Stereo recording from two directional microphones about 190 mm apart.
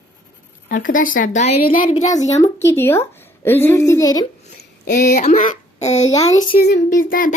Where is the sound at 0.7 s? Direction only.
45° left (ahead or behind).